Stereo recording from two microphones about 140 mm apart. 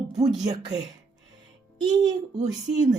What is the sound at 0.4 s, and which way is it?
A woman's voice, 25° right (ahead or behind).